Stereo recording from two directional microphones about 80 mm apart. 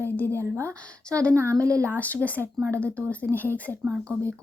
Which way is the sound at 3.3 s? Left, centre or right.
Right.